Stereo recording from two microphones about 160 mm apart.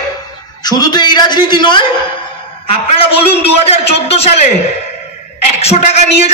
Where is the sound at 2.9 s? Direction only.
40° left (ahead or behind).